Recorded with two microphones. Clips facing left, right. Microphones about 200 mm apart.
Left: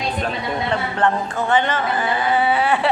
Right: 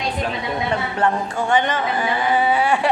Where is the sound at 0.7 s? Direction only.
10° right (ahead or behind).